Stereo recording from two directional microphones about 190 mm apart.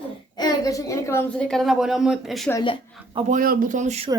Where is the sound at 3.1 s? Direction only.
45° right (ahead or behind).